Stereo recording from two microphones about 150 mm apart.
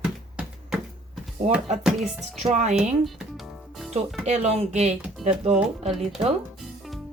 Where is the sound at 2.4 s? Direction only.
50° right (ahead or behind).